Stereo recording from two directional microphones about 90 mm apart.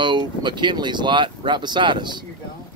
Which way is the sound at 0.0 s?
60° right (ahead or behind).